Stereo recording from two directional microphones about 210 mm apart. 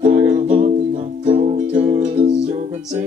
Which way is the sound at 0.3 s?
35° right (ahead or behind).